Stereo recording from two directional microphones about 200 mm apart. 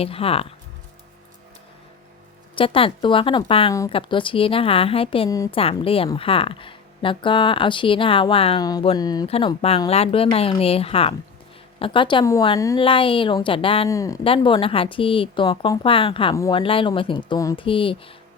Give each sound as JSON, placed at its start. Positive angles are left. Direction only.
{"t": 0.0, "sound": "speech", "side_deg": 30}
{"t": 2.6, "sound": "speech", "side_deg": 25}
{"t": 5.3, "sound": "a woman's voice", "side_deg": 15}
{"t": 5.5, "sound": "speech", "side_deg": 30}
{"t": 13.9, "sound": "a woman's voice", "side_deg": 15}
{"t": 16.3, "sound": "a woman's voice", "side_deg": 15}
{"t": 16.6, "sound": "speech", "side_deg": 25}